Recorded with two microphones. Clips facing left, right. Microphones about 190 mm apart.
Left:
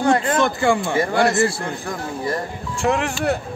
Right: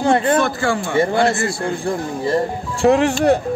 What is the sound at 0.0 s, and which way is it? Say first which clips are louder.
Speech: right 2 dB; 30° right (ahead or behind).